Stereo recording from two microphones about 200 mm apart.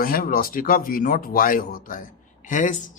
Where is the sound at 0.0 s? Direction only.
45° left (ahead or behind).